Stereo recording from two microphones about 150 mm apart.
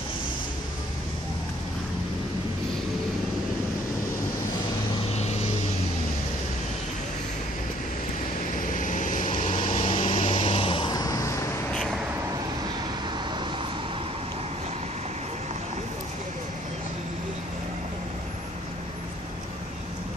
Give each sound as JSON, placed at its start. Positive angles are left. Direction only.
{"t": 5.1, "sound": "vehicle", "side_deg": 45}
{"t": 8.7, "sound": "vehicle", "side_deg": 60}
{"t": 9.7, "sound": "vehicle", "side_deg": 40}
{"t": 10.9, "sound": "vehicle", "side_deg": 25}